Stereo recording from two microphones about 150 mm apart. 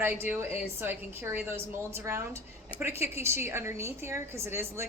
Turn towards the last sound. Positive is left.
turn(degrees=-15)  # may be behind; listen again after turning